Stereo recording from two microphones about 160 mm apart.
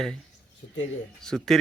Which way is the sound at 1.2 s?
5° left (ahead or behind).